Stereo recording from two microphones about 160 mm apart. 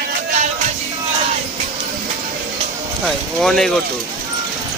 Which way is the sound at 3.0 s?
Centre (ahead or behind).